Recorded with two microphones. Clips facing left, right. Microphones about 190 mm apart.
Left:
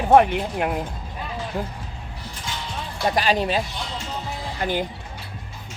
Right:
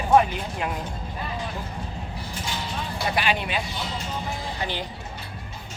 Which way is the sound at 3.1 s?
40° left (ahead or behind).